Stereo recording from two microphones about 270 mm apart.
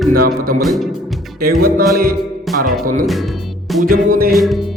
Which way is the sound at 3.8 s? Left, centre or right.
Right.